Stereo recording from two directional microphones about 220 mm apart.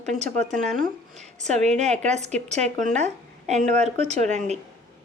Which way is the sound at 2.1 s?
30° right (ahead or behind).